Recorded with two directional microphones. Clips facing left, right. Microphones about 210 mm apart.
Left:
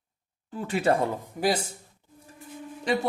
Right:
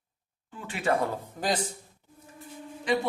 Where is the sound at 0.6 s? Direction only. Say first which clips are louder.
Left 6 dB; 40° left (ahead or behind).